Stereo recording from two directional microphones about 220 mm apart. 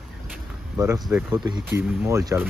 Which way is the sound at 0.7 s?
15° right (ahead or behind).